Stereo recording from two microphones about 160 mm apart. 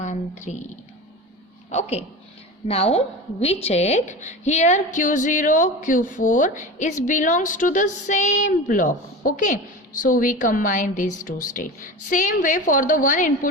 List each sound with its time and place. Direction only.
0.0 s speech: 50° left (ahead or behind)
1.7 s a woman's voice: 40° left (ahead or behind)